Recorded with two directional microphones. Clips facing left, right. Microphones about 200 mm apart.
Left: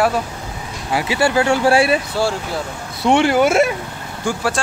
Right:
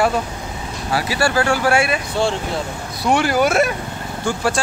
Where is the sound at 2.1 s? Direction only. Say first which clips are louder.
Even; 5° left (ahead or behind).